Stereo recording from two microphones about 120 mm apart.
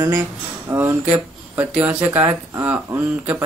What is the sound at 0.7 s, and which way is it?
Speech, 20° right (ahead or behind).